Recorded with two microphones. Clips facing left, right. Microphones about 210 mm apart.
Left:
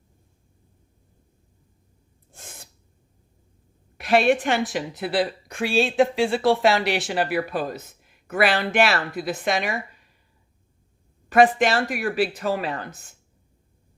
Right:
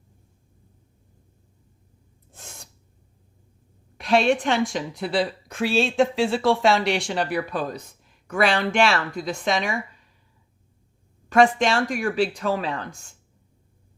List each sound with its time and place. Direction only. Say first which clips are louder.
2.3 s gasp: even; centre (ahead or behind)
3.9 s a woman's voice: left 1 dB; 5° left (ahead or behind)
11.3 s a woman's voice: left 1 dB; 5° left (ahead or behind)